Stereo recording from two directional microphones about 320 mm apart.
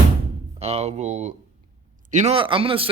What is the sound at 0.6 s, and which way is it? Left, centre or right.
A man's voice, centre.